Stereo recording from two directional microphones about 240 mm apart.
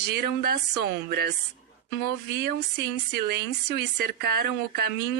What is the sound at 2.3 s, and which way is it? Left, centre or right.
A woman's voice, right.